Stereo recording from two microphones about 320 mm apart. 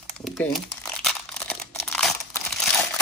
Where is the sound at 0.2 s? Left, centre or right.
Centre.